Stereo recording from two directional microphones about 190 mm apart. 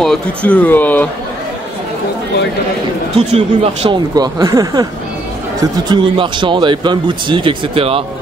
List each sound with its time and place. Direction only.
0.0 s speech: 5° left (ahead or behind)
3.2 s speech: 35° right (ahead or behind)
4.1 s speech: 20° right (ahead or behind)